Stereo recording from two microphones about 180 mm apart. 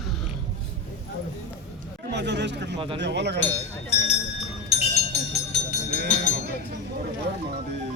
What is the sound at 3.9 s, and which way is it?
Speech, 35° left (ahead or behind).